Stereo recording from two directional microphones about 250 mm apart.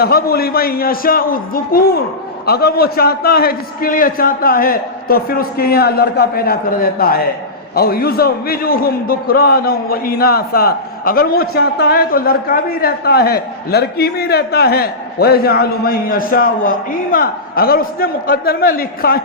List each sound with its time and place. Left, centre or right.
0.0 s a man's voice: left